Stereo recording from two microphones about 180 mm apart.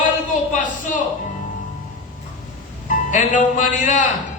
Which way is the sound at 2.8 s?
45° left (ahead or behind).